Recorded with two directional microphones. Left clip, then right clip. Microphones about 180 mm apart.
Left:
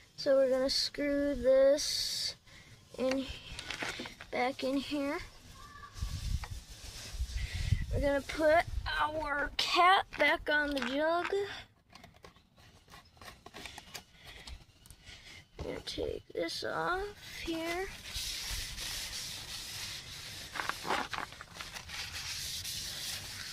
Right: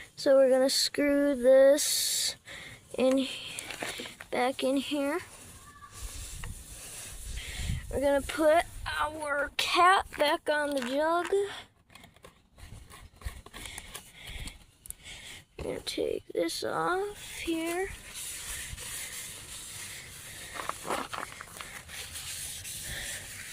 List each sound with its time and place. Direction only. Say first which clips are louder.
0.2 s a sound: right 6 dB; 60° right (ahead or behind)
3.9 s speech: right 4 dB; 55° right (ahead or behind)
7.3 s speech: right 3 dB; 45° right (ahead or behind)
15.6 s speech: right 5 dB; 50° right (ahead or behind)
20.6 s walk: even; 35° right (ahead or behind)